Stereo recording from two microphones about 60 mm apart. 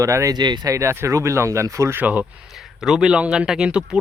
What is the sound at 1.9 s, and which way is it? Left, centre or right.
Speech, right.